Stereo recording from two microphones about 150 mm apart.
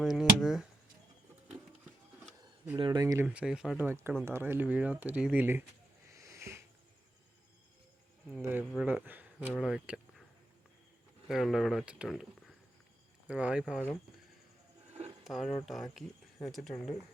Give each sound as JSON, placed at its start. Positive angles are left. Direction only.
{"t": 0.0, "sound": "speech", "side_deg": 0}
{"t": 2.7, "sound": "speech", "side_deg": -30}
{"t": 3.2, "sound": "speech", "side_deg": -5}
{"t": 3.8, "sound": "speech", "side_deg": -15}
{"t": 6.1, "sound": "a sound", "side_deg": -20}
{"t": 8.4, "sound": "speech", "side_deg": -15}
{"t": 11.3, "sound": "speech", "side_deg": 0}
{"t": 15.2, "sound": "speech", "side_deg": 0}